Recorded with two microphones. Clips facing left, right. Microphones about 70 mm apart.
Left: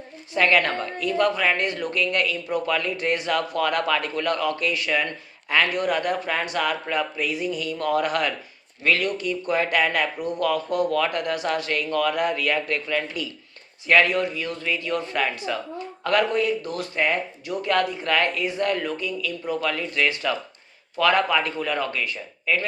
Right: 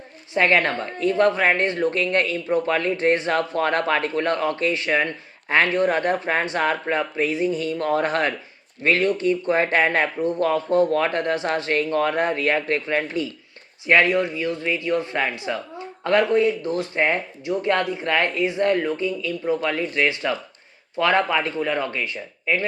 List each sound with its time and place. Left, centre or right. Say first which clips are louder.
0.3 s speech: right 1 dB; right